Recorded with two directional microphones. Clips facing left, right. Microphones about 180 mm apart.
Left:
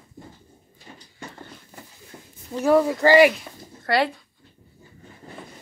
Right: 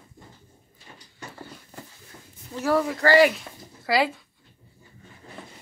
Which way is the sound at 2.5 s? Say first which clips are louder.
Left 5 dB; 15° left (ahead or behind).